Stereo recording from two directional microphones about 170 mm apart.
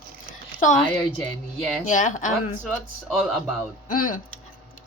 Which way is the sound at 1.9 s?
45° left (ahead or behind).